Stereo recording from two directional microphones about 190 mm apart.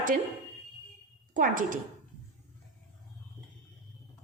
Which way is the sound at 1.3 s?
45° right (ahead or behind).